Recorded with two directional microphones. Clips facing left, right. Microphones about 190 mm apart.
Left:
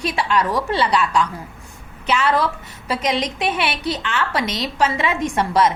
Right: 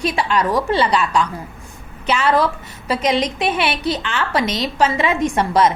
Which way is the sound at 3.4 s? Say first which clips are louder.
Right 2 dB; 35° right (ahead or behind).